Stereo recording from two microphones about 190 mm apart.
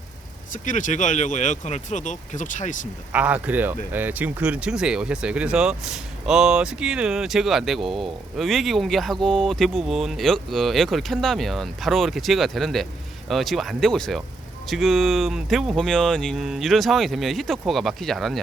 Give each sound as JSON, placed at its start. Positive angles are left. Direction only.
{"t": 0.5, "sound": "speech", "side_deg": 40}
{"t": 3.1, "sound": "speech", "side_deg": -5}